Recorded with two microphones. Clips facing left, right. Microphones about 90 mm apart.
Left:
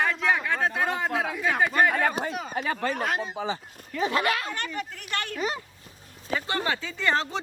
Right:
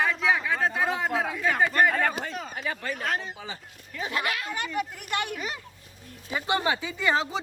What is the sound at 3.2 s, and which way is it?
Speech, 30° left (ahead or behind).